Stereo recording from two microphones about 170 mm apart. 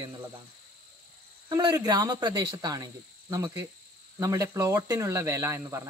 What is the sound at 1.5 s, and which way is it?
Speech, 25° right (ahead or behind).